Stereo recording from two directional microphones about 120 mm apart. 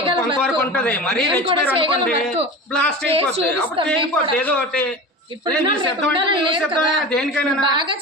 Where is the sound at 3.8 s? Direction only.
10° left (ahead or behind).